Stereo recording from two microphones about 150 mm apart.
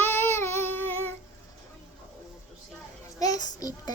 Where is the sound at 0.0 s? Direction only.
15° left (ahead or behind).